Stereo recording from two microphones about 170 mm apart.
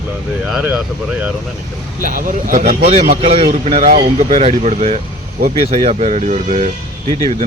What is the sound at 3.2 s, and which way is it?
Speech, 35° right (ahead or behind).